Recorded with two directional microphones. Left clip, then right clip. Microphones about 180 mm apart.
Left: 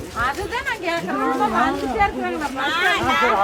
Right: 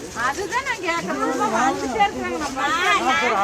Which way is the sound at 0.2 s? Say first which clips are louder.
Even; 60° left (ahead or behind).